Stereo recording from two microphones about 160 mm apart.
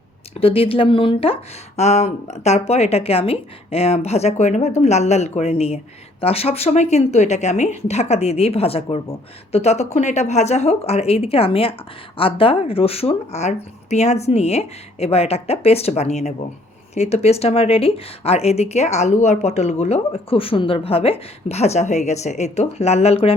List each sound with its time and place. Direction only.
0.3 s speech: 35° left (ahead or behind)